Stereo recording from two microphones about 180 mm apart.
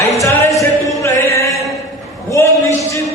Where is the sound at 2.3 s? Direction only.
15° left (ahead or behind).